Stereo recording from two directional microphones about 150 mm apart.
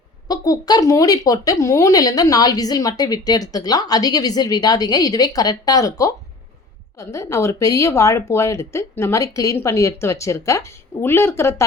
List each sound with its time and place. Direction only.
0.3 s speech: 25° left (ahead or behind)